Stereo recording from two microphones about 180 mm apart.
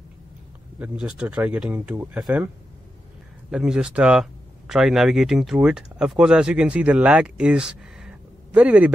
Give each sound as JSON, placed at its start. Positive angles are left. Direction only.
{"t": 0.7, "sound": "speech", "side_deg": -5}